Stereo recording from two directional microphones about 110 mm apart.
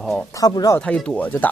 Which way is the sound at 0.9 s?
15° left (ahead or behind).